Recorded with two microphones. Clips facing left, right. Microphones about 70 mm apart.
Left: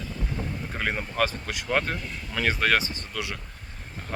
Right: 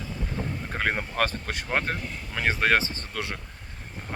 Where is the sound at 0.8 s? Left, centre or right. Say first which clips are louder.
Even; right.